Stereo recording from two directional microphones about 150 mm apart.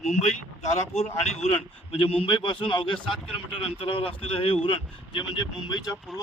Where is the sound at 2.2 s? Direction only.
35° left (ahead or behind).